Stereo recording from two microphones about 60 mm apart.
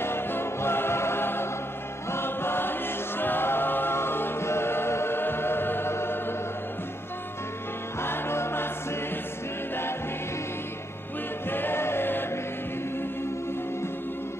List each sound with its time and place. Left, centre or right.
0.0 s music: left
2.0 s choir: left
8.0 s music: left
11.4 s choir: left